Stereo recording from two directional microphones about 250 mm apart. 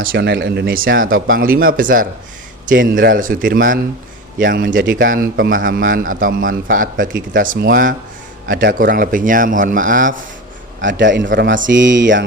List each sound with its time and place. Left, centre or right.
0.1 s a man's voice: right
10.8 s speech: right